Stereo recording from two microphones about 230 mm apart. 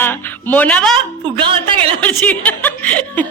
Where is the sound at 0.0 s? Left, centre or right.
Centre.